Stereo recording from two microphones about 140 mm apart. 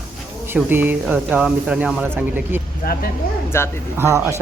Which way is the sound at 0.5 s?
15° right (ahead or behind).